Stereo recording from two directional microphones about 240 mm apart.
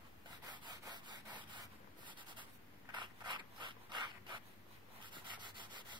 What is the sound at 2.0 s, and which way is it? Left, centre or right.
Writing, centre.